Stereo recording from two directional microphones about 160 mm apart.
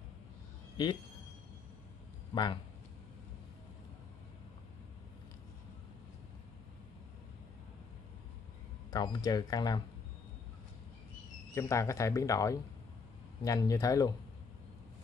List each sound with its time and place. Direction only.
0.8 s speech: 30° left (ahead or behind)
2.3 s speech: 30° left (ahead or behind)
8.9 s speech: 25° left (ahead or behind)
11.5 s speech: 20° left (ahead or behind)